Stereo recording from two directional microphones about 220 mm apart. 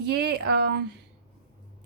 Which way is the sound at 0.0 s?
50° right (ahead or behind).